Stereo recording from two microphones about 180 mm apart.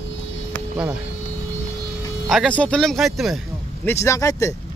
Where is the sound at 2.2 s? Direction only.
Centre (ahead or behind).